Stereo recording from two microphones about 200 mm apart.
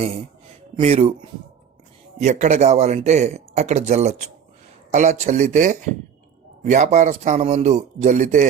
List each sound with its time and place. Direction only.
0.0 s speech: 30° right (ahead or behind)